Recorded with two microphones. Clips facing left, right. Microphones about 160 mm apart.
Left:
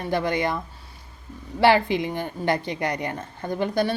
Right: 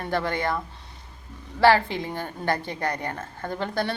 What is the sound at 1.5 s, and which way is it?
A woman's voice, 15° left (ahead or behind).